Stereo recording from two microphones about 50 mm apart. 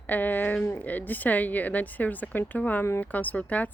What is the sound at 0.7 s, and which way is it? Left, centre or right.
Speech, left.